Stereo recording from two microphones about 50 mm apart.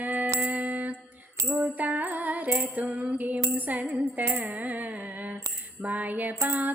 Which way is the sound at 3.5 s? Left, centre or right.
Right.